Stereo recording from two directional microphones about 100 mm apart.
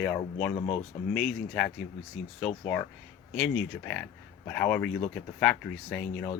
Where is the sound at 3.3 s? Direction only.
5° left (ahead or behind).